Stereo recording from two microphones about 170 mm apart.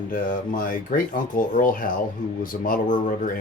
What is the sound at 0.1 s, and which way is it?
Speech, 50° left (ahead or behind).